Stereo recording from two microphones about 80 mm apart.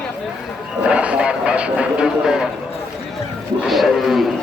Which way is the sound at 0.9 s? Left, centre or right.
Centre.